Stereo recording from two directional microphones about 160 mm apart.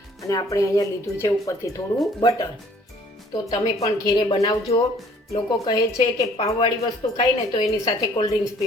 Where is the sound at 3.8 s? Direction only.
25° left (ahead or behind).